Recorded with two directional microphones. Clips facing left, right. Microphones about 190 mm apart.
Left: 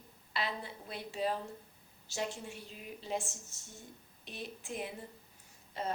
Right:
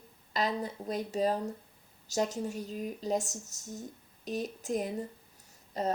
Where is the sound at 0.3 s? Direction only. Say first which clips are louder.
Right 7 dB; 40° right (ahead or behind).